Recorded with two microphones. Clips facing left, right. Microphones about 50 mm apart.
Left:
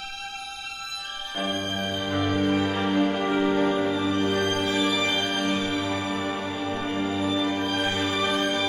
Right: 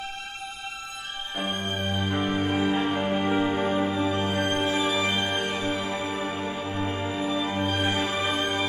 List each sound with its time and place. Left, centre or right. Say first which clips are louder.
1.3 s music: left 2 dB; right